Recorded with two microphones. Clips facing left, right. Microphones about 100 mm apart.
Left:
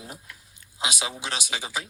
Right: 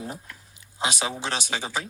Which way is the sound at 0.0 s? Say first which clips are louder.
Right 6 dB; 35° right (ahead or behind).